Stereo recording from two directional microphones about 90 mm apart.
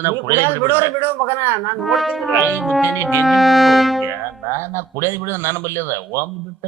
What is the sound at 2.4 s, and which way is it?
Music, 25° left (ahead or behind).